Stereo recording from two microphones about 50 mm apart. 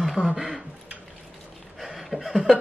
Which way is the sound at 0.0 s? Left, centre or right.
Centre.